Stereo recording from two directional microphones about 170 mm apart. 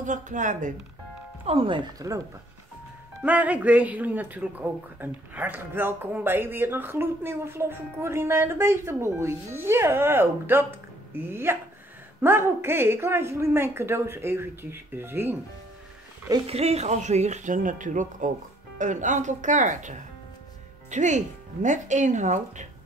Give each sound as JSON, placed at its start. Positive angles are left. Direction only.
{"t": 0.0, "sound": "speech", "side_deg": -45}
{"t": 1.4, "sound": "speech", "side_deg": -35}
{"t": 3.2, "sound": "speech", "side_deg": -10}
{"t": 16.4, "sound": "speech", "side_deg": -40}